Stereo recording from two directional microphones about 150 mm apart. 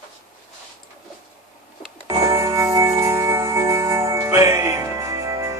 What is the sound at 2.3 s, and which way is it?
Music, 20° right (ahead or behind).